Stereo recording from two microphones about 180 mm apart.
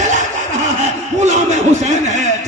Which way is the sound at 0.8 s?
40° right (ahead or behind).